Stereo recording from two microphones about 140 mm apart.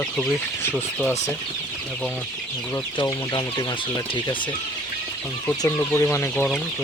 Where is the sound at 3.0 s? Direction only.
30° left (ahead or behind).